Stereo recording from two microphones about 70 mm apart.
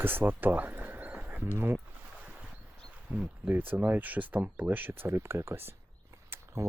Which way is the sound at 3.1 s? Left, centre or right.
Centre.